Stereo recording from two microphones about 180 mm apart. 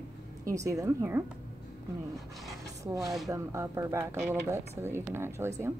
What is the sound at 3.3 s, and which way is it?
A woman's voice, 15° right (ahead or behind).